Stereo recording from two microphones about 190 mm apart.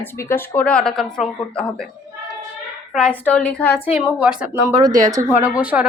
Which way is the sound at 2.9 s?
5° left (ahead or behind).